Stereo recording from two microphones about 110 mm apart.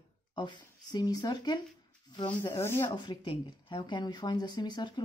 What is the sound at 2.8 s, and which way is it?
Speech, 40° left (ahead or behind).